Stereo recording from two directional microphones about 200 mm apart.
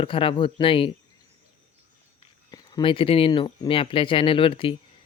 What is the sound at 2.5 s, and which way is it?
Speech, 20° left (ahead or behind).